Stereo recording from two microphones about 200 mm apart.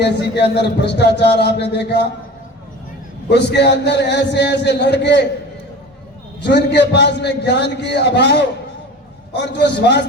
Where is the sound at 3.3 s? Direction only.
60° left (ahead or behind).